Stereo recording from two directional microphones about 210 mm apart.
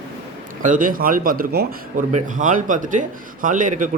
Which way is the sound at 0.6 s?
40° right (ahead or behind).